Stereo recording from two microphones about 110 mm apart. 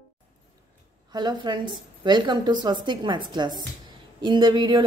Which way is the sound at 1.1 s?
40° right (ahead or behind).